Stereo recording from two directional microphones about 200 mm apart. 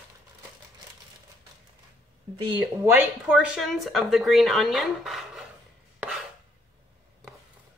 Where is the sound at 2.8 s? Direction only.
10° right (ahead or behind).